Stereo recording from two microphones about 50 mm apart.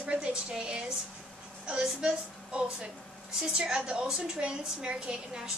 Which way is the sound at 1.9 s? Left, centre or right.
Centre.